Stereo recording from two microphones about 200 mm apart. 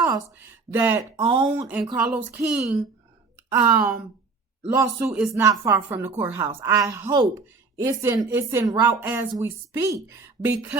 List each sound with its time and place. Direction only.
0.3 s speech: 10° right (ahead or behind)
1.1 s speech: 25° right (ahead or behind)
1.4 s speech: 10° right (ahead or behind)